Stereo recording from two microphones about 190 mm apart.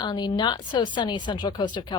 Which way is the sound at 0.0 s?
20° left (ahead or behind).